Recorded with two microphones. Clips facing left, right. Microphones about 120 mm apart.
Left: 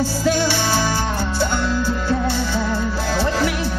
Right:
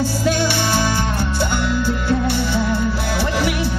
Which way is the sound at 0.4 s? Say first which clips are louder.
Even; 15° right (ahead or behind).